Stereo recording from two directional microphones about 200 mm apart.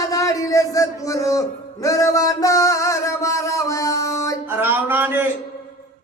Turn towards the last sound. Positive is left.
turn(degrees=-10)  # may be behind; listen again after turning